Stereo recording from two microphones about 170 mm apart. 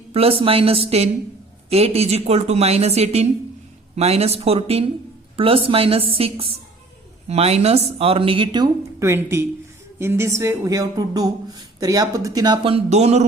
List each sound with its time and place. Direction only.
0.1 s a woman's voice: 35° right (ahead or behind)